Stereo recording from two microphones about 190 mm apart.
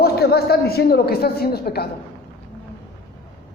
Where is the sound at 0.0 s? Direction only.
55° left (ahead or behind).